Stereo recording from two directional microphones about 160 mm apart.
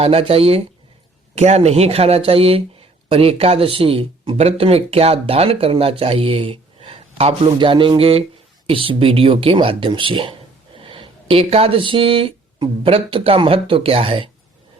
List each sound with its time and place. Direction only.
0.0 s speech: 40° right (ahead or behind)